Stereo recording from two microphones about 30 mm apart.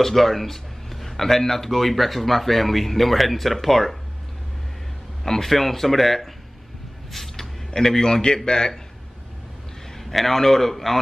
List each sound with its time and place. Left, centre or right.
0.0 s a man's voice: centre
5.2 s a man's voice: centre
7.1 s vehicle: centre
7.7 s a man's voice: centre
9.9 s a man's voice: centre